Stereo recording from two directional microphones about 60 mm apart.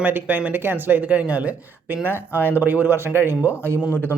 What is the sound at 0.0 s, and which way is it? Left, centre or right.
A man's voice, right.